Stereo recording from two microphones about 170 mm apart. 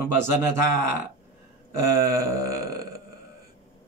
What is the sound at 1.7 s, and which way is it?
Speech, 20° right (ahead or behind).